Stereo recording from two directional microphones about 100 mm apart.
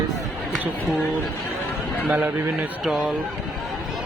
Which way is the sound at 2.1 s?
15° right (ahead or behind).